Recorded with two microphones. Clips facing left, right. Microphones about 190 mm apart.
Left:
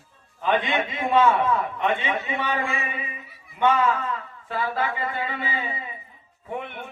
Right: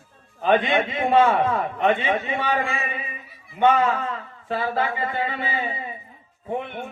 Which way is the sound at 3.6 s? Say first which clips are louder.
Right 2 dB; 30° right (ahead or behind).